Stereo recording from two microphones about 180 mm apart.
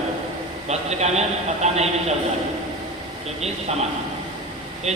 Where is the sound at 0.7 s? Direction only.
40° right (ahead or behind).